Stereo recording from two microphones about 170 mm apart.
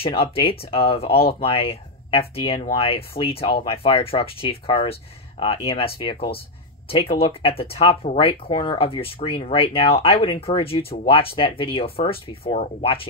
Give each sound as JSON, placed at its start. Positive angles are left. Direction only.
{"t": 0.0, "sound": "speech", "side_deg": 35}